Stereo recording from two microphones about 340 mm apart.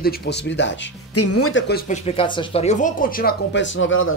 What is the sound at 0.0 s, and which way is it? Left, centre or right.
Speech, left.